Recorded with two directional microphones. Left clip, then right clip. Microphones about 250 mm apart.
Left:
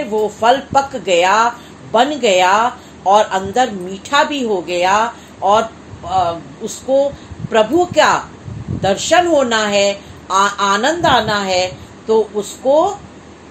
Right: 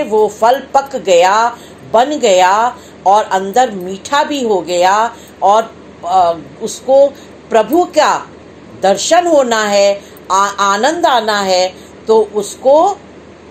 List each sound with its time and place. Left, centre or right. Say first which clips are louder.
0.1 s speech: right 3 dB; centre